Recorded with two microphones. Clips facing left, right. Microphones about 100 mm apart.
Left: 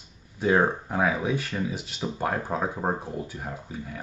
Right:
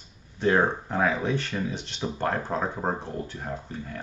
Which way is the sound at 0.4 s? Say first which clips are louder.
Even; 5° left (ahead or behind).